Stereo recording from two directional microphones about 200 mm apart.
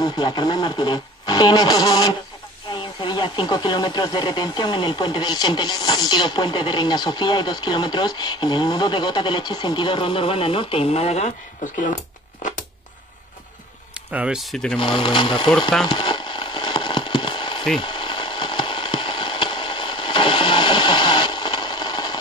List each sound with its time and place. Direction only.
0.0 s speech: 20° left (ahead or behind); by 11.9 s 35° left (ahead or behind)
14.1 s speech: 5° right (ahead or behind)
14.8 s speech: 25° left (ahead or behind)
15.9 s a sound: 25° left (ahead or behind)